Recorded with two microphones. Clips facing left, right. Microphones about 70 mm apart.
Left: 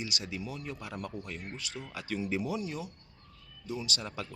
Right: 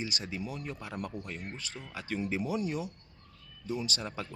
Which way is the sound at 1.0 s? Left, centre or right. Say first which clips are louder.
Right 1 dB; centre.